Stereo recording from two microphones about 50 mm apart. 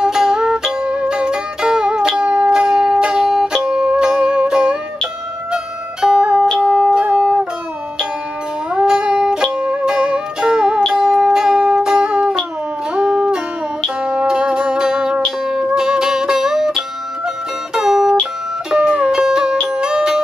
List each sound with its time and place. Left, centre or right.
0.0 s music: centre
8.7 s music: centre
17.7 s music: centre